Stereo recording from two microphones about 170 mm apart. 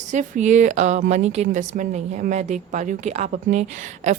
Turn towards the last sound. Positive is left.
turn(degrees=-45)  # may be behind; listen again after turning